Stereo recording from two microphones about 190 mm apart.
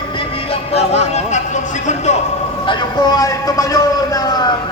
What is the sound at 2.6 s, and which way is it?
A man's voice, 25° left (ahead or behind).